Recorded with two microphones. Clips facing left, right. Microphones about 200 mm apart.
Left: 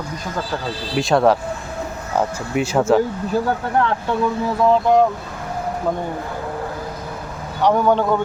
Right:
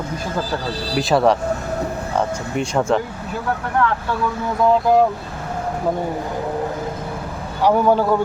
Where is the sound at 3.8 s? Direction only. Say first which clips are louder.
Even; 30° left (ahead or behind).